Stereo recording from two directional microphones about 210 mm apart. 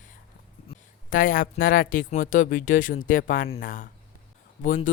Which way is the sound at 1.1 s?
40° left (ahead or behind).